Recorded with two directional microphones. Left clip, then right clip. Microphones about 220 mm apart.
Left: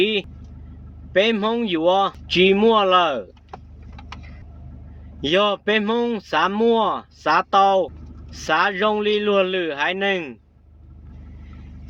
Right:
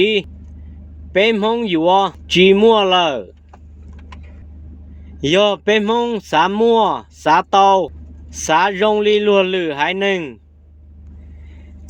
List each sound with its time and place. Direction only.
0.0 s speech: 35° right (ahead or behind)
5.2 s speech: 35° right (ahead or behind)